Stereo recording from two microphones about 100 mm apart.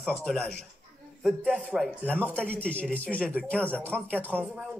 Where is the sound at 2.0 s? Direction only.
15° left (ahead or behind).